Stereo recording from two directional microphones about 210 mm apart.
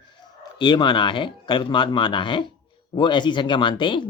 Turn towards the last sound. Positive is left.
turn(degrees=25)  # may be behind; listen again after turning